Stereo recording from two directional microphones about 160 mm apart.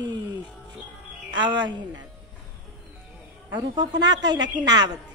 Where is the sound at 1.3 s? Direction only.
25° right (ahead or behind).